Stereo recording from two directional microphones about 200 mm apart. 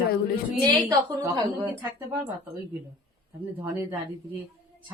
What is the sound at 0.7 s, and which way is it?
A woman's voice, 20° right (ahead or behind).